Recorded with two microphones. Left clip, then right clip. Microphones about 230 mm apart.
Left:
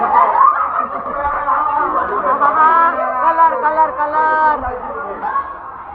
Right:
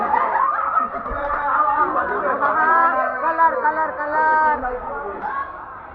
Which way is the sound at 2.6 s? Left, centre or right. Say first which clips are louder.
Left 4 dB; centre.